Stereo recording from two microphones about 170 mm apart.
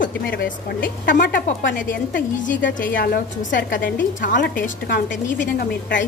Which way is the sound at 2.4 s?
50° left (ahead or behind).